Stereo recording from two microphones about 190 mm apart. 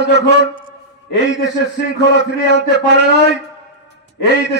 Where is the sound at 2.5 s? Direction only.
65° right (ahead or behind).